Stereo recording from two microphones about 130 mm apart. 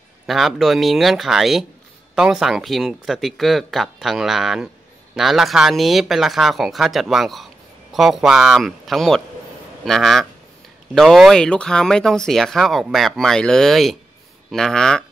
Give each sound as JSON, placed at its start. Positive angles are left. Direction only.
{"t": 0.3, "sound": "speech", "side_deg": 0}